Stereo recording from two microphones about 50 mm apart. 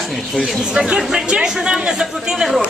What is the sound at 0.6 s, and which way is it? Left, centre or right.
Speech, centre.